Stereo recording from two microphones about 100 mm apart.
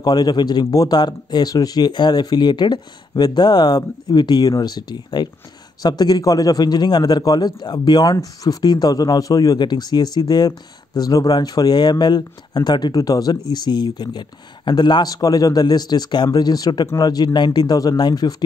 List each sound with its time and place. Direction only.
0.0 s speech: 45° left (ahead or behind)